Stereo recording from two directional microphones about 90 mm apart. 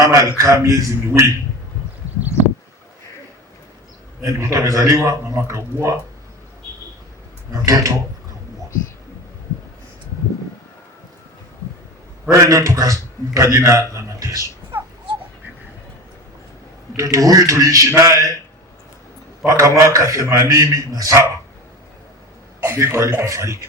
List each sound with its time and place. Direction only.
0.1 s a man's voice: 35° right (ahead or behind)
4.2 s a man's voice: 35° right (ahead or behind)
7.6 s a man's voice: 40° right (ahead or behind)
12.3 s a man's voice: 40° right (ahead or behind)
17.0 s a man's voice: 40° right (ahead or behind)
19.5 s a man's voice: 35° right (ahead or behind)
22.6 s a man's voice: 30° right (ahead or behind)